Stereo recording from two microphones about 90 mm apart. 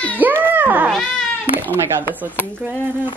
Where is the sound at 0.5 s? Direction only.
20° right (ahead or behind).